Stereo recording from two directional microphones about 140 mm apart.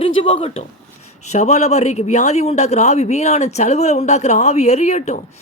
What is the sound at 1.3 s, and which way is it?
Speech, 55° left (ahead or behind).